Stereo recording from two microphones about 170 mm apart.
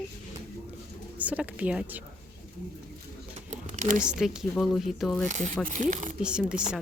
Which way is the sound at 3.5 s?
50° right (ahead or behind).